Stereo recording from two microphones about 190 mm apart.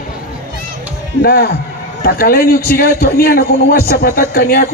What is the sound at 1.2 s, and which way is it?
A man's voice, 55° left (ahead or behind).